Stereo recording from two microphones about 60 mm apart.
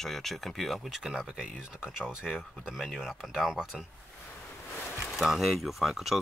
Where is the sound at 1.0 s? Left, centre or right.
Centre.